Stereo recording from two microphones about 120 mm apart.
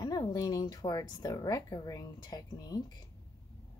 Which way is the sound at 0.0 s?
35° left (ahead or behind).